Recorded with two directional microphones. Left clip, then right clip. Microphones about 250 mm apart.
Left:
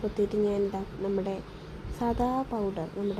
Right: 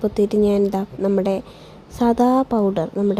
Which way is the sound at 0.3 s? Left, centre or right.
Right.